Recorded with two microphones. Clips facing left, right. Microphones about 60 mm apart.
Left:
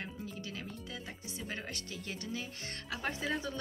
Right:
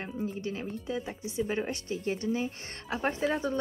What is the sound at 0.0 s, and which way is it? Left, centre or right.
A woman's voice, right.